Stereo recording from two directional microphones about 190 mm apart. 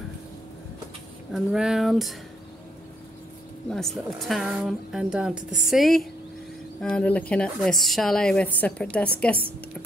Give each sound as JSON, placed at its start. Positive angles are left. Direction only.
{"t": 1.3, "sound": "speech", "side_deg": -5}
{"t": 3.7, "sound": "speech", "side_deg": 0}